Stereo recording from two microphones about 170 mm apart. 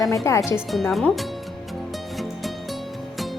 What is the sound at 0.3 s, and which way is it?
Speech, 15° left (ahead or behind).